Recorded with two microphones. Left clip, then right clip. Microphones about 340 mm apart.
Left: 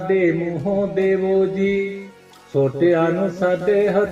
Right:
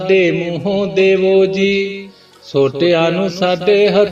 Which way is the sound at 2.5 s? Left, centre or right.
Right.